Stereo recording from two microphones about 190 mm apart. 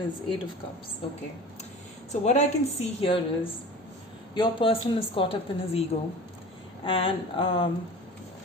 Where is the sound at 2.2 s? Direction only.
35° left (ahead or behind).